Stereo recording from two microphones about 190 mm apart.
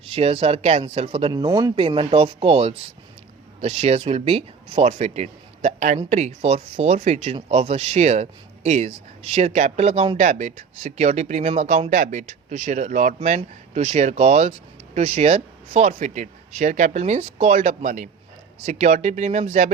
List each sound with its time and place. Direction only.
0.1 s speech: 30° right (ahead or behind)